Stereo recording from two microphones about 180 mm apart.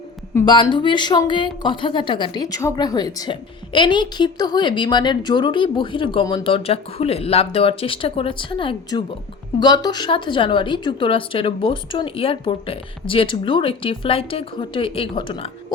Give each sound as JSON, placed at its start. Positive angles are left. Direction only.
{"t": 0.4, "sound": "a woman's voice", "side_deg": 25}